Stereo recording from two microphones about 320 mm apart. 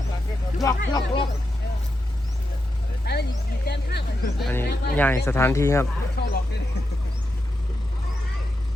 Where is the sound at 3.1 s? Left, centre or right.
Left.